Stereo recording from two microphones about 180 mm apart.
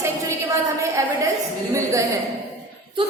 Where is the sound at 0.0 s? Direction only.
15° right (ahead or behind).